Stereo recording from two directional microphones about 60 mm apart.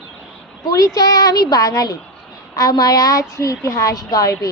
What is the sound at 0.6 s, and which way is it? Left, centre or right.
A woman's voice, left.